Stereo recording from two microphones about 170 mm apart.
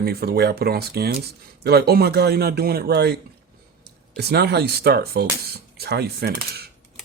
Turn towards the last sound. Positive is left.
turn(degrees=-65)  # may be behind; listen again after turning